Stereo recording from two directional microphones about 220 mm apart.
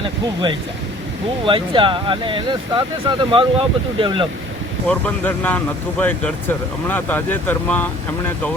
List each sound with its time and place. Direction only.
1.5 s speech: 25° right (ahead or behind)
4.9 s speech: 5° left (ahead or behind)